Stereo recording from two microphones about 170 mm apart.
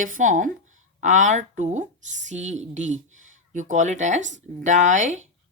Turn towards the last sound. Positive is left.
turn(degrees=-45)  # may be behind; listen again after turning